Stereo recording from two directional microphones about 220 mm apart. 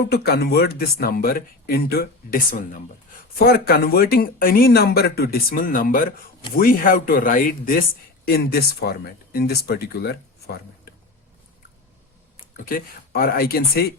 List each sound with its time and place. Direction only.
0.1 s speech: 45° left (ahead or behind)
12.5 s speech: 40° left (ahead or behind)